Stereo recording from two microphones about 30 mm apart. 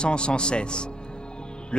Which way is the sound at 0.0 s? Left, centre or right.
Left.